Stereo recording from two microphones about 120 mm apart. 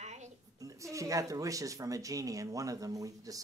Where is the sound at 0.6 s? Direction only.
25° right (ahead or behind).